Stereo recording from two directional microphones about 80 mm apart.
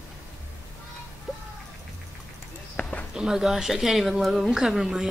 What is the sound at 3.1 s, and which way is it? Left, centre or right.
A woman's voice, centre.